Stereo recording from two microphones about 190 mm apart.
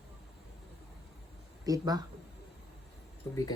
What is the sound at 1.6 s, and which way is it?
Speech, 20° right (ahead or behind).